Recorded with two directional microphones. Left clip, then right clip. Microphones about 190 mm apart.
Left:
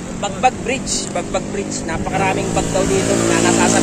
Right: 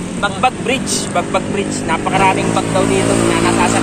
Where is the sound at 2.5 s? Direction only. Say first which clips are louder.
Right 3 dB; 20° left (ahead or behind).